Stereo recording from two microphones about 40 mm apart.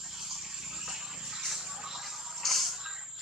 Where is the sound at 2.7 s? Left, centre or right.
Centre.